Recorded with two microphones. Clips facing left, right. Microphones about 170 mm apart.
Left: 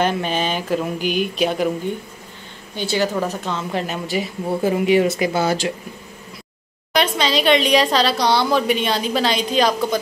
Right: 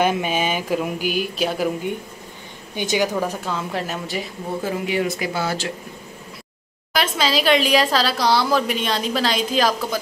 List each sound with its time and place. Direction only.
0.0 s speech: 10° right (ahead or behind)
2.7 s speech: 15° right (ahead or behind)
4.8 s speech: 20° left (ahead or behind)
6.9 s a woman's voice: centre (ahead or behind)